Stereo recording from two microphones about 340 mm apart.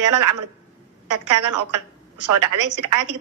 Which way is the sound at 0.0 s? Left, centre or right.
Right.